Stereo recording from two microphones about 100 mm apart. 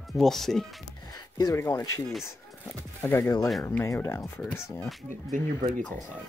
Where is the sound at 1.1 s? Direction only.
40° left (ahead or behind).